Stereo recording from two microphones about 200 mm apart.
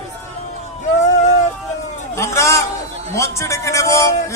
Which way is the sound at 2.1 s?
15° left (ahead or behind).